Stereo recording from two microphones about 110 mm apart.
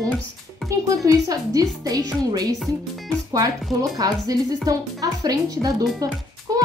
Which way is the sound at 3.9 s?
35° right (ahead or behind).